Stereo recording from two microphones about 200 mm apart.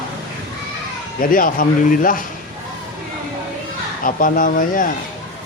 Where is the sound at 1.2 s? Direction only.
45° left (ahead or behind).